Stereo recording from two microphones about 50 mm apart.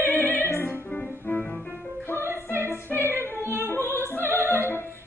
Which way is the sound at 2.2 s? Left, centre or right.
Right.